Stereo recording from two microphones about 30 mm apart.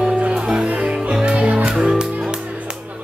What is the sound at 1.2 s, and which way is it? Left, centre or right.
Music, right.